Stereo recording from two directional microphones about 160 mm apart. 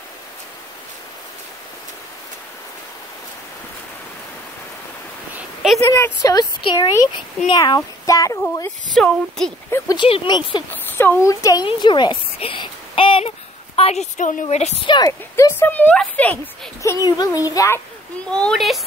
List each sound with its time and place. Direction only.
5.3 s a sound: 5° right (ahead or behind)
5.9 s speech: 15° left (ahead or behind)
6.6 s a child's voice: 30° left (ahead or behind)
8.9 s speech: 5° left (ahead or behind)
9.7 s a child's voice: 20° left (ahead or behind)
10.7 s a woman's voice: 15° left (ahead or behind); by 14.7 s 50° left (ahead or behind)
14.9 s a child's voice: 25° left (ahead or behind)
18.3 s speech: 5° left (ahead or behind)